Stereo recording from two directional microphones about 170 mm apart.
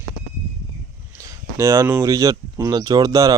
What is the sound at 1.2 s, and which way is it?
Speech, 20° right (ahead or behind).